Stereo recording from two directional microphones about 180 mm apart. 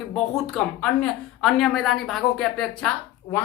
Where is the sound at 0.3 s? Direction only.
5° left (ahead or behind).